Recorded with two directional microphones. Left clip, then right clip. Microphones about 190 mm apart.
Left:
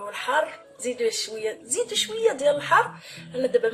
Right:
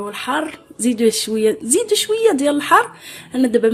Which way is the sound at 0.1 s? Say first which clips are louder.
Even; 50° right (ahead or behind).